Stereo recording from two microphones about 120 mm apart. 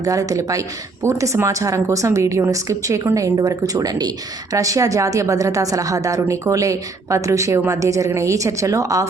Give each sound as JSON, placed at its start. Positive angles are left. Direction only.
{"t": 0.0, "sound": "speech", "side_deg": -30}